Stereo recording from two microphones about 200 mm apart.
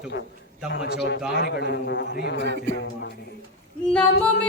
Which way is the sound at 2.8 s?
55° left (ahead or behind).